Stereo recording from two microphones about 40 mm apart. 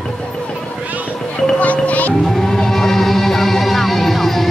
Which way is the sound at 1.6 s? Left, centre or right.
Left.